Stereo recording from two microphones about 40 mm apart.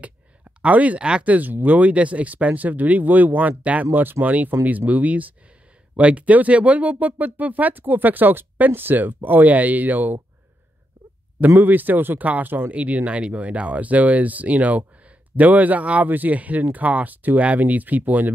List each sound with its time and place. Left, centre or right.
0.6 s speech: right
3.8 s speech: right
11.4 s speech: right
12.7 s speech: right